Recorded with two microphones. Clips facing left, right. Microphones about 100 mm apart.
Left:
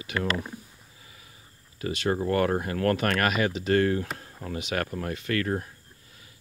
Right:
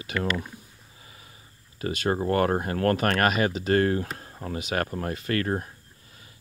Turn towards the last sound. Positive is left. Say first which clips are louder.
# right 1 dB
turn(degrees=-35)  # may be behind; listen again after turning